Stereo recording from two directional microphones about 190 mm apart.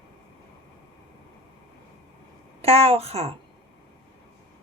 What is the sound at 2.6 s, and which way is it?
Speech, 30° right (ahead or behind).